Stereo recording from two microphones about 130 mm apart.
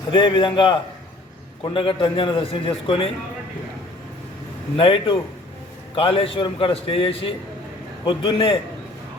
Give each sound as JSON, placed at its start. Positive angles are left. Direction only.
{"t": 0.1, "sound": "a man's voice", "side_deg": 40}
{"t": 4.8, "sound": "a man's voice", "side_deg": 45}